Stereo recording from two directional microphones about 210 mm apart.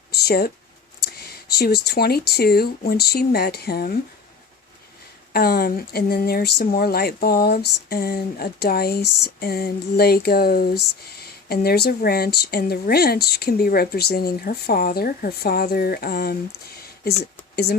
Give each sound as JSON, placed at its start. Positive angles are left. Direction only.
{"t": 0.1, "sound": "a sound", "side_deg": 50}
{"t": 1.0, "sound": "speech", "side_deg": 50}
{"t": 5.3, "sound": "speech", "side_deg": 45}